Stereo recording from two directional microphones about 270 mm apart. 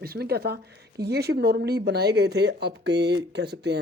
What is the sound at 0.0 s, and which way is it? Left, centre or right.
Speech, right.